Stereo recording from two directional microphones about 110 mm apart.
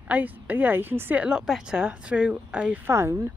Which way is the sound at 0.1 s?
15° right (ahead or behind).